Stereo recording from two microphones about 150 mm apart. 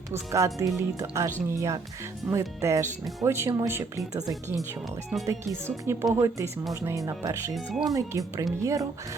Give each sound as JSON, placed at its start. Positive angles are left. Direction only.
{"t": 0.1, "sound": "speech", "side_deg": -20}
{"t": 5.6, "sound": "speech", "side_deg": -15}
{"t": 7.5, "sound": "speech", "side_deg": 0}
{"t": 7.9, "sound": "speech", "side_deg": -20}